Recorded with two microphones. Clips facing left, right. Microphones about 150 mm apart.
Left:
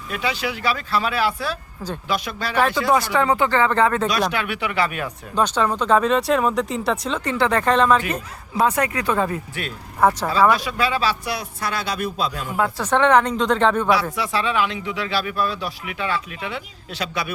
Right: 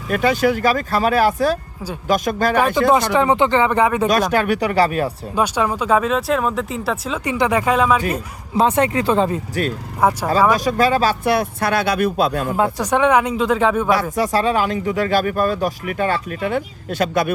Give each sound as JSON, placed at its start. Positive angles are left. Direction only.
{"t": 0.1, "sound": "speech", "side_deg": -50}
{"t": 2.9, "sound": "speech", "side_deg": -20}
{"t": 4.1, "sound": "speech", "side_deg": -45}
{"t": 5.3, "sound": "speech", "side_deg": -10}
{"t": 8.5, "sound": "speech", "side_deg": -25}
{"t": 10.0, "sound": "speech", "side_deg": -10}
{"t": 10.6, "sound": "speech", "side_deg": -45}
{"t": 12.5, "sound": "speech", "side_deg": -25}
{"t": 12.8, "sound": "speech", "side_deg": -10}
{"t": 13.9, "sound": "speech", "side_deg": -45}